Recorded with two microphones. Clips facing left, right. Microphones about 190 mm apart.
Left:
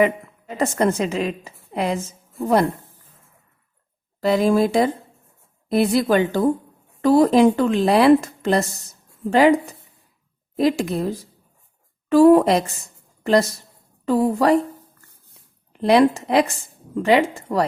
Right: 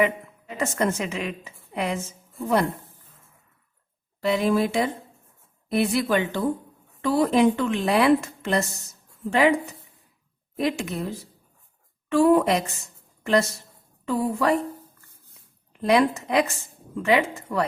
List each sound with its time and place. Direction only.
0.0 s a woman's voice: 35° left (ahead or behind)
4.2 s a woman's voice: 40° left (ahead or behind)
10.6 s a woman's voice: 35° left (ahead or behind)
15.7 s a woman's voice: 30° left (ahead or behind)